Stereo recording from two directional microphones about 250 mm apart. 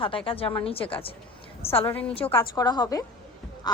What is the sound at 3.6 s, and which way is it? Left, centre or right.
Music, centre.